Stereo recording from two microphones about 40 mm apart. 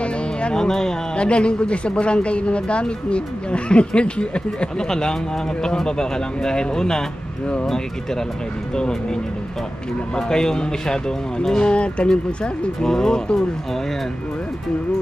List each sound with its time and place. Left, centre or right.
0.0 s music: left
0.6 s speech: centre
1.1 s speech: left
4.8 s speech: centre
12.8 s speech: centre